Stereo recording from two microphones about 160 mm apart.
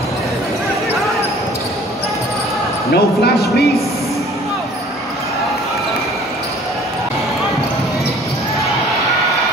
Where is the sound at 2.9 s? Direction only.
90° left.